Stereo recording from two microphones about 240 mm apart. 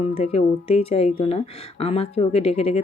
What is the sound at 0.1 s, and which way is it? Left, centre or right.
Speech, left.